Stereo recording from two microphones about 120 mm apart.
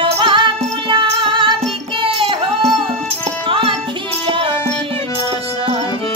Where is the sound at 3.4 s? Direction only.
50° right (ahead or behind).